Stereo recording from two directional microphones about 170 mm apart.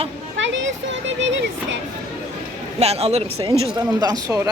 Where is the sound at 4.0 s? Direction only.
20° right (ahead or behind).